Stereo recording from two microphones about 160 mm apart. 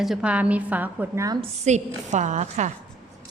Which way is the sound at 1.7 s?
45° right (ahead or behind).